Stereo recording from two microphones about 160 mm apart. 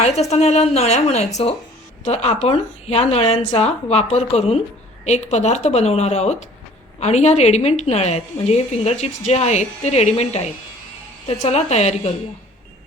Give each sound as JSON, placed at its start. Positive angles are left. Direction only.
{"t": 0.0, "sound": "a woman's voice", "side_deg": 45}